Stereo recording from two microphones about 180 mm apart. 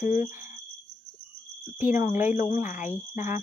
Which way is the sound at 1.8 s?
10° right (ahead or behind).